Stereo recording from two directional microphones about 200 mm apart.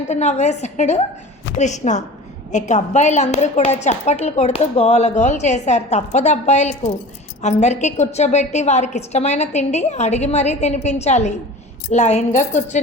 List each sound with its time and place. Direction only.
0.1 s a woman's voice: 35° left (ahead or behind)